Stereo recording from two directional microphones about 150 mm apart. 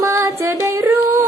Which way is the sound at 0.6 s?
15° right (ahead or behind).